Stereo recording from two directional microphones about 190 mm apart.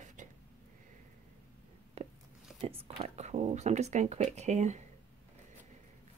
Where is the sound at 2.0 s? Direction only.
30° right (ahead or behind).